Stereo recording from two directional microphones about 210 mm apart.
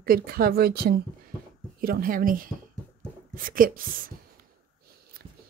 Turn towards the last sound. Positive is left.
turn(degrees=-40)  # may be behind; listen again after turning